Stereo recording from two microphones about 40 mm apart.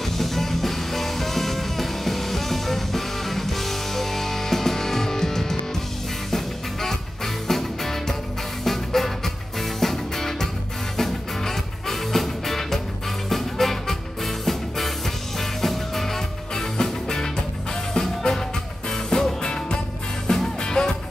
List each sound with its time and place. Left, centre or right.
0.2 s music: centre